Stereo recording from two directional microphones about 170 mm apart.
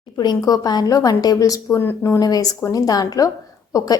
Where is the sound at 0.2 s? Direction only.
25° left (ahead or behind).